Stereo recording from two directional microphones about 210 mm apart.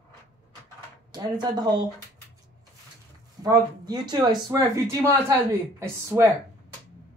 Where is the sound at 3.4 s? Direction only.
20° right (ahead or behind).